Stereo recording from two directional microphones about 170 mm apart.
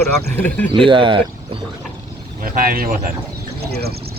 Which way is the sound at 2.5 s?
55° right (ahead or behind).